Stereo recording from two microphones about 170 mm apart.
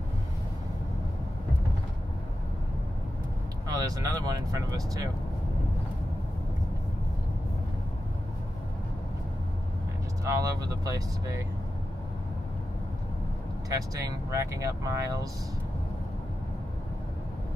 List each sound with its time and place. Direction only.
3.6 s speech: 20° right (ahead or behind)
10.2 s speech: 20° right (ahead or behind)
13.7 s speech: 20° right (ahead or behind)